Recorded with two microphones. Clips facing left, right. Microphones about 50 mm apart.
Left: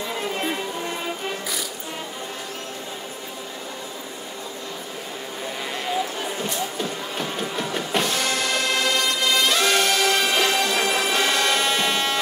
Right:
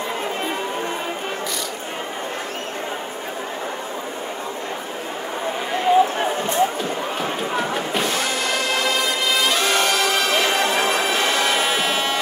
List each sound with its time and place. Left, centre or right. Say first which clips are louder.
5.9 s a sound: right 9 dB; right
6.8 s run: right 4 dB; centre
7.9 s music: right 1 dB; centre
10.5 s music: right 2 dB; right
11.1 s bagpipes: right 1 dB; centre